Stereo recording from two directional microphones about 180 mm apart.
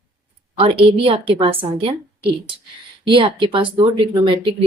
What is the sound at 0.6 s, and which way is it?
A woman's voice, 30° right (ahead or behind).